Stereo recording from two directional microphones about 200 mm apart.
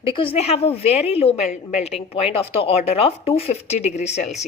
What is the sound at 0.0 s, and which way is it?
Speech, 25° left (ahead or behind).